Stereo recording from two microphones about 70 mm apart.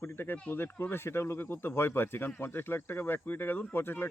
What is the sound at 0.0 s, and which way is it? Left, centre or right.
Speech, left.